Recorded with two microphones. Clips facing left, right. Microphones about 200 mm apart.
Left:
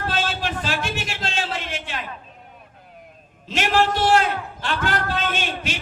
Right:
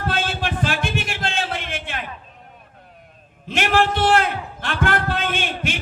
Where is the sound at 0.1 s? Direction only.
55° right (ahead or behind).